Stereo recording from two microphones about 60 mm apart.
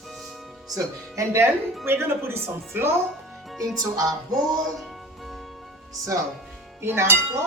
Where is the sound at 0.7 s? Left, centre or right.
Right.